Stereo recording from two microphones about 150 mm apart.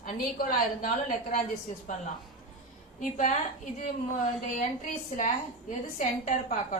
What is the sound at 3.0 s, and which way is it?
Speech, 55° left (ahead or behind).